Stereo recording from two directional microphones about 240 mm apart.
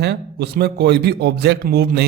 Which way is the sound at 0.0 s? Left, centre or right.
Right.